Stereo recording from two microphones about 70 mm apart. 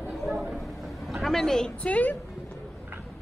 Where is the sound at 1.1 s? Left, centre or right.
Centre.